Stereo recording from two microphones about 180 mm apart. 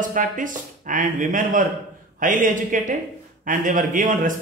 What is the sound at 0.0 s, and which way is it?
Speech, 50° right (ahead or behind).